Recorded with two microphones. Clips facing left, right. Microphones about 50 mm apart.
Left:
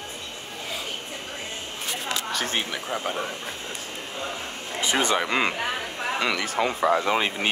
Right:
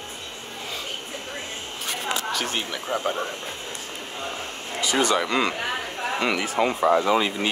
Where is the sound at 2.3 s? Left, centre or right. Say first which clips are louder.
Right 1 dB; left.